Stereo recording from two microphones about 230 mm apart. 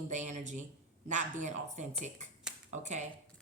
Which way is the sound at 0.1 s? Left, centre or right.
Right.